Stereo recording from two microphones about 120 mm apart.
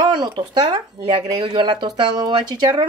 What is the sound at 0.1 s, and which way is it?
Speech, 35° right (ahead or behind).